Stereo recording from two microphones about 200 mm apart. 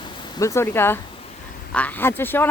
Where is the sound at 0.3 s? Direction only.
15° left (ahead or behind).